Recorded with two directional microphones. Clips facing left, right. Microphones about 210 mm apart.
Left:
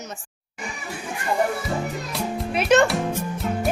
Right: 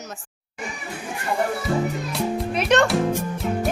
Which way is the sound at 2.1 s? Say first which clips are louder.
Even; centre (ahead or behind).